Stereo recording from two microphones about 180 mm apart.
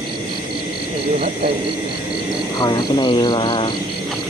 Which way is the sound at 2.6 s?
25° left (ahead or behind).